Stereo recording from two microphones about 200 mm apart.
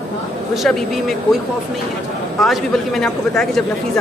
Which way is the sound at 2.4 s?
Centre (ahead or behind).